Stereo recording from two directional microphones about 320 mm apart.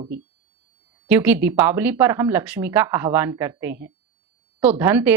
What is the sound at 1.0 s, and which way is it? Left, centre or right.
A woman's voice, centre.